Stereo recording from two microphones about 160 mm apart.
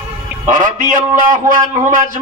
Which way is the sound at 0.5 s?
55° right (ahead or behind).